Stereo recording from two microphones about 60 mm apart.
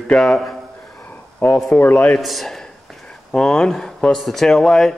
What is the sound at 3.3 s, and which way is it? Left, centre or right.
Speech, centre.